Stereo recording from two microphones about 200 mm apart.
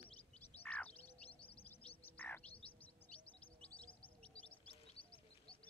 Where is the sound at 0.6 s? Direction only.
10° left (ahead or behind).